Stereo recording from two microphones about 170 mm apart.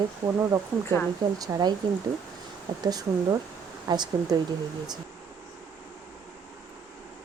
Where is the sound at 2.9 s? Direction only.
20° right (ahead or behind).